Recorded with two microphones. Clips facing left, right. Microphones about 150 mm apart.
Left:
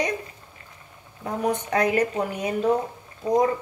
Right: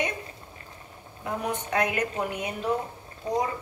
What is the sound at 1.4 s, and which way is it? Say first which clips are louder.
A woman's voice: left 5 dB; 35° left (ahead or behind).